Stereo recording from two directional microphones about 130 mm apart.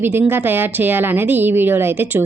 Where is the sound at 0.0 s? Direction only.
15° right (ahead or behind).